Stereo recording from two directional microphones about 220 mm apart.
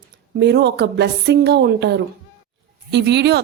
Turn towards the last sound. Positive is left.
turn(degrees=-50)  # may be behind; listen again after turning